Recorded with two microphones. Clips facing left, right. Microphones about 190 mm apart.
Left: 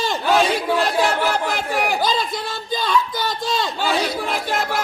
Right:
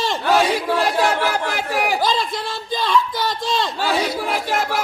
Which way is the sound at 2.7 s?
Centre (ahead or behind).